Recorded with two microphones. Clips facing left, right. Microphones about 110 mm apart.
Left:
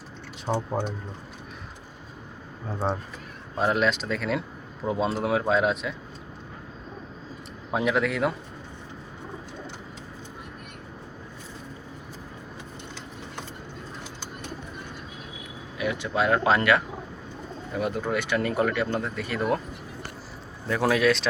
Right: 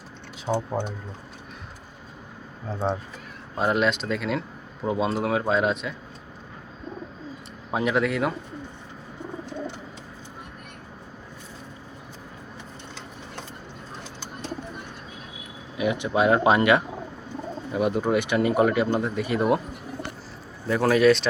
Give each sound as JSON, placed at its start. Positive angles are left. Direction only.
{"t": 0.5, "sound": "speech", "side_deg": 5}
{"t": 2.7, "sound": "speech", "side_deg": 0}
{"t": 7.7, "sound": "speech", "side_deg": 0}
{"t": 15.8, "sound": "speech", "side_deg": -20}
{"t": 20.7, "sound": "speech", "side_deg": 0}